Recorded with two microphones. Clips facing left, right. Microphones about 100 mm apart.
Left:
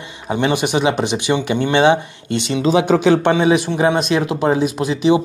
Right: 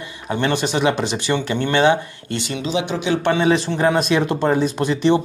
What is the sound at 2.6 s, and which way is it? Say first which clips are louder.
Speech: left 10 dB; 45° left (ahead or behind).